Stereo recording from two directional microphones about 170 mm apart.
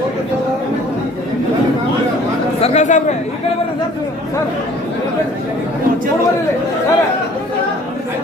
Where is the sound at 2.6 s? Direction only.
45° left (ahead or behind).